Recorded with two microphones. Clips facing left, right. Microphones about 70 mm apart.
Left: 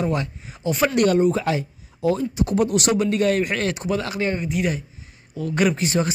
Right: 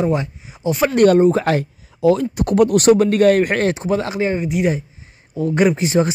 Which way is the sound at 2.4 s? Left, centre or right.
Right.